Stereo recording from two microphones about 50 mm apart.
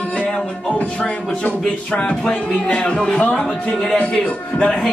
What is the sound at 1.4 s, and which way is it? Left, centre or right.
Music, left.